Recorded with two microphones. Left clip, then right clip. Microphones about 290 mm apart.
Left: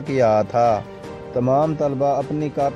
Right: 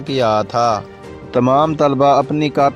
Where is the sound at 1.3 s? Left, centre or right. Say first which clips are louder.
Right 5 dB; right.